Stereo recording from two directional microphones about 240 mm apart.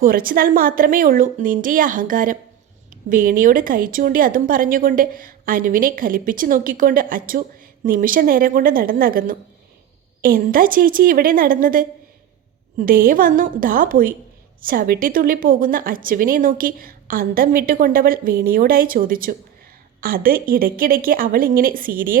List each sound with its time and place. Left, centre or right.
0.0 s a woman's voice: right